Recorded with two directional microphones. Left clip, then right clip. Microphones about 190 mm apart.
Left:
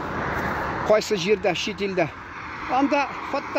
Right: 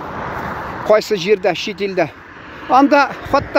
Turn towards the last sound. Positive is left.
turn(degrees=-40)  # may be behind; listen again after turning